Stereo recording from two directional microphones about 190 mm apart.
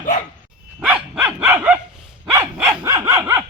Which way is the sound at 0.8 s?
5° right (ahead or behind).